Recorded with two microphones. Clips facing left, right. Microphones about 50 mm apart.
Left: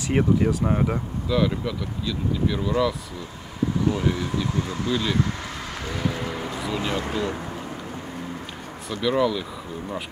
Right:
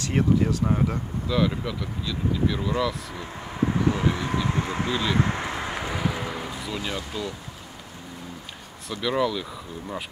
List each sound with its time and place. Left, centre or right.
0.1 s speech: centre
1.3 s speech: centre
3.8 s speech: right
5.1 s vehicle: right; by 6.8 s centre
7.0 s speech: left
9.0 s speech: centre